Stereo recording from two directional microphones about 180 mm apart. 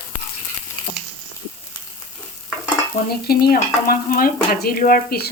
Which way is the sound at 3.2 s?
60° left (ahead or behind).